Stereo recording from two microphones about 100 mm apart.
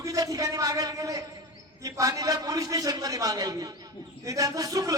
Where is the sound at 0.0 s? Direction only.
35° right (ahead or behind).